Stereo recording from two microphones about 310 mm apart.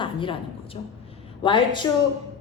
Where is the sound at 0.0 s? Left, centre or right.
Centre.